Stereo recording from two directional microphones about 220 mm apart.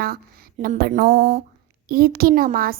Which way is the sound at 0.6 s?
45° right (ahead or behind).